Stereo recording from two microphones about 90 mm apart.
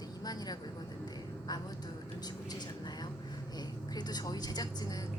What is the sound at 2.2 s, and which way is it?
Vehicle, 50° left (ahead or behind).